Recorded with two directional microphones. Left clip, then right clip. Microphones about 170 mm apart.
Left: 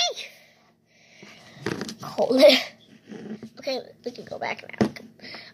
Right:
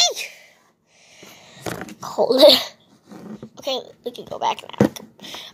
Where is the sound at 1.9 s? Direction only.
50° right (ahead or behind).